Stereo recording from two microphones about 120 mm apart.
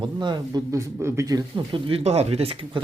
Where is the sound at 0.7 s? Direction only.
25° right (ahead or behind).